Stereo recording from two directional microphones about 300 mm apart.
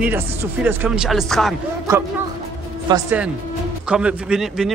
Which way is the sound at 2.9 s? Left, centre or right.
Centre.